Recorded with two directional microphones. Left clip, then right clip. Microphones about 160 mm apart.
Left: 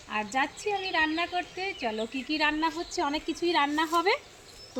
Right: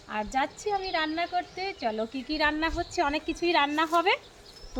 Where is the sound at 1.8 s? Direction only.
5° right (ahead or behind).